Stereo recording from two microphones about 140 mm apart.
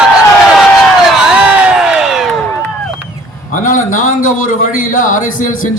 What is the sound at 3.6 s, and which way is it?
Speech, 70° left (ahead or behind).